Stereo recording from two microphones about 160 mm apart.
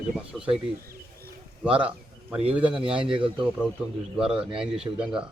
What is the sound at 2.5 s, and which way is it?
Speech, 10° right (ahead or behind).